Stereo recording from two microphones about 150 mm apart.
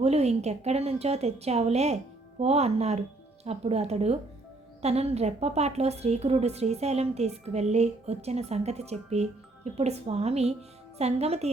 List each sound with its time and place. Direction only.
0.0 s a woman's voice: 45° right (ahead or behind)